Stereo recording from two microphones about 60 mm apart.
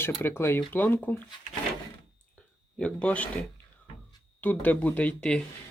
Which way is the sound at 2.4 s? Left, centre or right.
Left.